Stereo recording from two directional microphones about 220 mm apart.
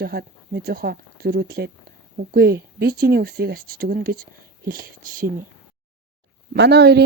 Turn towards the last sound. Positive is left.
turn(degrees=-50)  # may be behind; listen again after turning